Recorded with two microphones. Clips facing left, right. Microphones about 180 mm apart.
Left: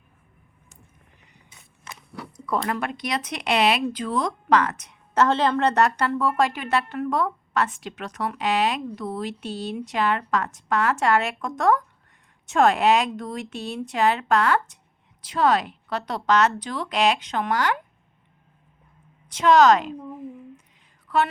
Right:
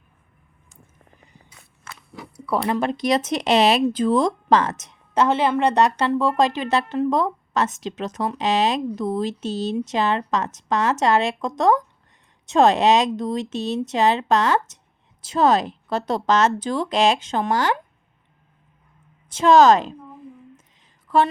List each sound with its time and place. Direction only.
2.3 s a sound: 10° right (ahead or behind)
2.6 s speech: 20° right (ahead or behind)
5.1 s speech: 10° right (ahead or behind)
19.4 s speech: 30° right (ahead or behind)